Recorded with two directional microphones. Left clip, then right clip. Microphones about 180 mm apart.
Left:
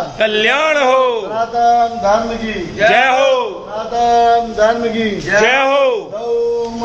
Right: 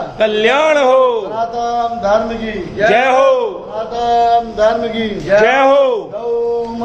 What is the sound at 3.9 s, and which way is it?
Speech, 25° left (ahead or behind).